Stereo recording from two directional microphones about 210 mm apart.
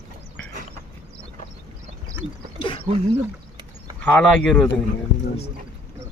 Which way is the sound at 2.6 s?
25° left (ahead or behind).